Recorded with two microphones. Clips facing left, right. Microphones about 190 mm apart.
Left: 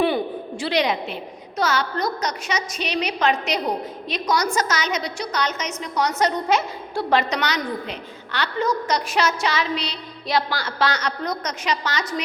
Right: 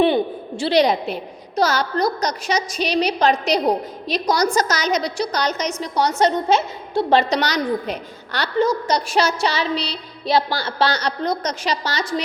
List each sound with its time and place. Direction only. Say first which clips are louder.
0.0 s a woman's voice: right 4 dB; 25° right (ahead or behind)